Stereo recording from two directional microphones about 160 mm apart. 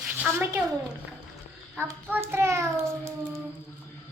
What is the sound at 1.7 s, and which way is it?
A child's voice, 10° right (ahead or behind).